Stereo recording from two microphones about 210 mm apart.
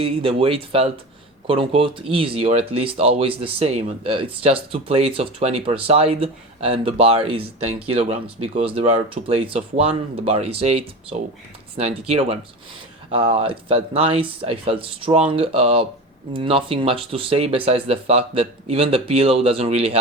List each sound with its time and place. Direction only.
0.0 s speech: 25° right (ahead or behind)